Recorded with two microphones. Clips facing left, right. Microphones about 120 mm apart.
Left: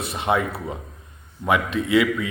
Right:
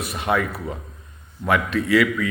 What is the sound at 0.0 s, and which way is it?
A man's voice, 25° left (ahead or behind).